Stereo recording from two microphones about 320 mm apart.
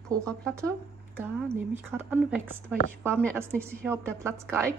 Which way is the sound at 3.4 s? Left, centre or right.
Centre.